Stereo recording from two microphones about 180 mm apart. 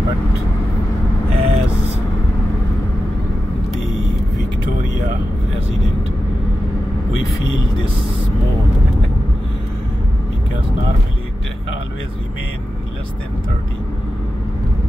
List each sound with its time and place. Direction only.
1.3 s vehicle: 35° right (ahead or behind)